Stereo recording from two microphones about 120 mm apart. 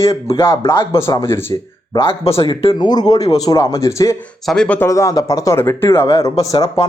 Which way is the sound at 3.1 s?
30° left (ahead or behind).